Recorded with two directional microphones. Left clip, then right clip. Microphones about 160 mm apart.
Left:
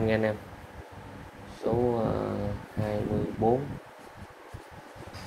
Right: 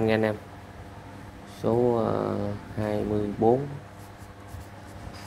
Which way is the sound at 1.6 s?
45° right (ahead or behind).